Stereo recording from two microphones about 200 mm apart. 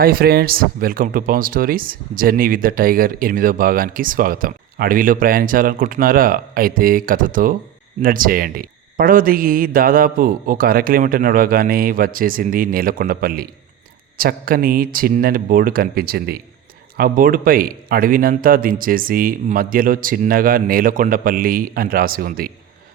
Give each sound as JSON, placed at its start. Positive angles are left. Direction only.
{"t": 0.0, "sound": "speech", "side_deg": -50}